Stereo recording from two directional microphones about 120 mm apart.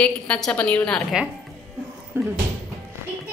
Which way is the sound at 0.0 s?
10° left (ahead or behind).